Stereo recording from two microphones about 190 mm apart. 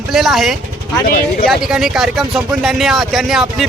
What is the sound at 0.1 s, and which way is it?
Speech, centre (ahead or behind).